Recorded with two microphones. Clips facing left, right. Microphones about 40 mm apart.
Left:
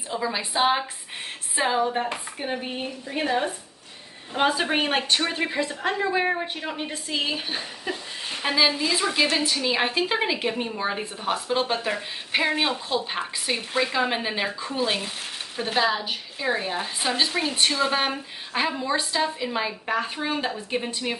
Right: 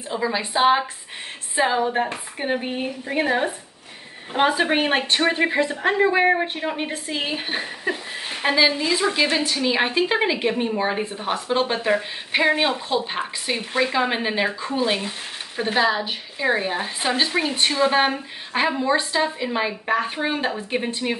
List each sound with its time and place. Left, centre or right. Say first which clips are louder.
0.1 s a woman's voice: right 3 dB; centre
2.3 s a woman's voice: right 5 dB; right
8.5 s speech: right 3 dB; centre